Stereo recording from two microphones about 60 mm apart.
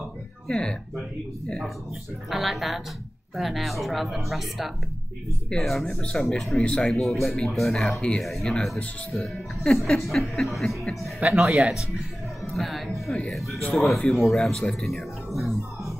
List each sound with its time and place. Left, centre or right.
0.5 s speech: centre
2.2 s speech: centre
6.6 s speech: centre
6.9 s speech: centre